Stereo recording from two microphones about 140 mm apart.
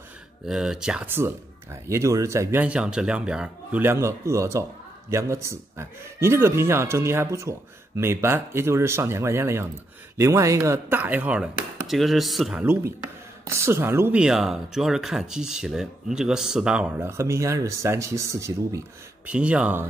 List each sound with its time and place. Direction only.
0.5 s speech: 5° right (ahead or behind)
1.0 s speech: 15° right (ahead or behind)
13.5 s speech: 20° right (ahead or behind)
14.2 s speech: 5° right (ahead or behind); by 18.8 s 20° right (ahead or behind)
19.2 s speech: 10° right (ahead or behind)